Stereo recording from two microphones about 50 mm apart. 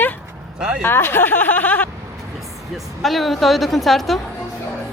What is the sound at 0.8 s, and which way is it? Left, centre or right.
Speech, left.